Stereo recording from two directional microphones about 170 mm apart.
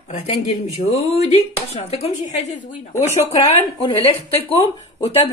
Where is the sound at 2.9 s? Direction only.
15° left (ahead or behind).